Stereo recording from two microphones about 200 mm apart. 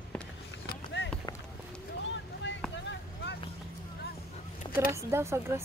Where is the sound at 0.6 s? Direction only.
60° left (ahead or behind).